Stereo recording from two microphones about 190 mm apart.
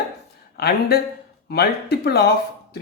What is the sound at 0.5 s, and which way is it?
Speech, 60° left (ahead or behind).